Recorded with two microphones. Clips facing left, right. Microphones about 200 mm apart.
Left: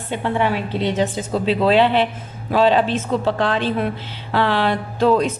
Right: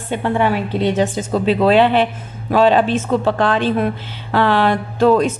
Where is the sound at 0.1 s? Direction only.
50° right (ahead or behind).